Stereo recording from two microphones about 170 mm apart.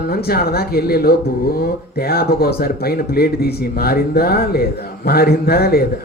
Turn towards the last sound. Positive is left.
turn(degrees=65)  # may be behind; listen again after turning